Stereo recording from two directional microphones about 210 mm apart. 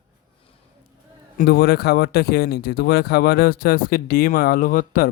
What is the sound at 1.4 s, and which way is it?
Speech, 50° left (ahead or behind).